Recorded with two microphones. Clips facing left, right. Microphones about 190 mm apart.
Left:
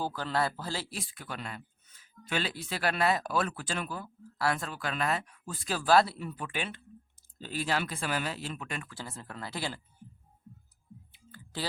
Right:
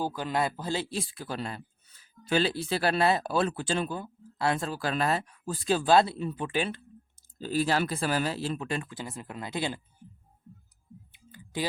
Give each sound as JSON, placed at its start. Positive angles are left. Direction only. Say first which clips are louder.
{"t": 0.0, "sound": "a man's voice", "louder": "right 2 dB", "side_deg": -15}
{"t": 8.9, "sound": "a man's voice", "louder": "right 4 dB", "side_deg": -15}
{"t": 11.1, "sound": "a sound", "louder": "right 5 dB", "side_deg": -15}